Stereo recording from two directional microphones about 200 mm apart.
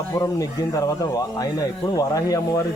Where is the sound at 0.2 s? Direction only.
15° left (ahead or behind).